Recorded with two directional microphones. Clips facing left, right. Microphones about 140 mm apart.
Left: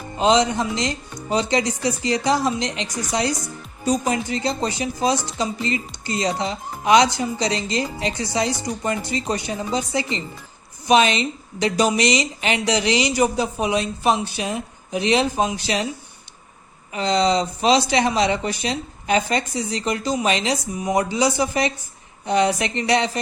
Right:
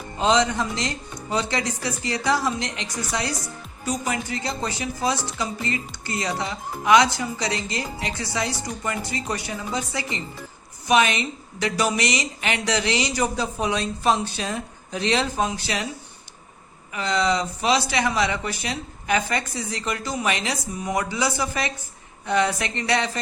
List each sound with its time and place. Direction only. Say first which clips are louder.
0.2 s speech: left 3 dB; 20° left (ahead or behind)
16.9 s speech: left 4 dB; 25° left (ahead or behind)